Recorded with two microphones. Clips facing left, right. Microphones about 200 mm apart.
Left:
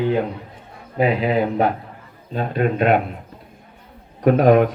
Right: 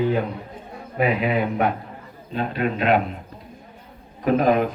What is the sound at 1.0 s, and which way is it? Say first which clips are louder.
Speech: left 3 dB; 30° left (ahead or behind).